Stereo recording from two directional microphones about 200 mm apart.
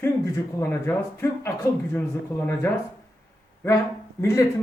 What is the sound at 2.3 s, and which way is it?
Speech, 10° left (ahead or behind).